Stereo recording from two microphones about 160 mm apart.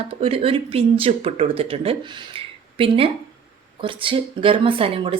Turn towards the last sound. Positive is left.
turn(degrees=-35)  # may be behind; listen again after turning